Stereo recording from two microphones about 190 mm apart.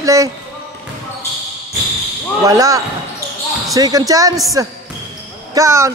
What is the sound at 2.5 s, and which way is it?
Speech, 15° right (ahead or behind).